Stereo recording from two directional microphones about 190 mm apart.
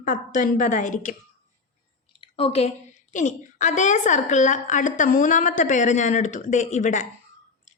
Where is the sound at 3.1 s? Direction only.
40° left (ahead or behind).